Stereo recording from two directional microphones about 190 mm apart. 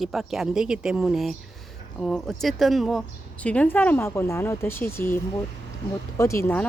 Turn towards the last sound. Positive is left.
turn(degrees=10)  # may be behind; listen again after turning